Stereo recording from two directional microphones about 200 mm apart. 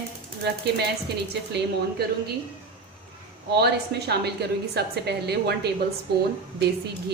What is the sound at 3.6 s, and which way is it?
A woman's voice, 55° right (ahead or behind).